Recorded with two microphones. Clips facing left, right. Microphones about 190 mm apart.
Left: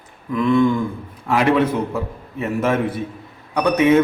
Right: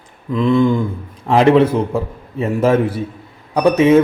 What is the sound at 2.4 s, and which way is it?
Speech, 30° right (ahead or behind).